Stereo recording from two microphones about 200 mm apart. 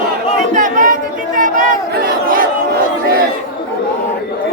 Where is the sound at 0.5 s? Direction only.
40° right (ahead or behind).